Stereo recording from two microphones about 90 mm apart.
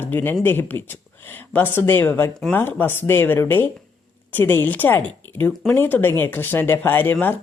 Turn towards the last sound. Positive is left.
turn(degrees=20)  # may be behind; listen again after turning